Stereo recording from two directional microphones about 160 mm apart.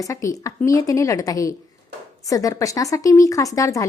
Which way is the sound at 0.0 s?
20° left (ahead or behind).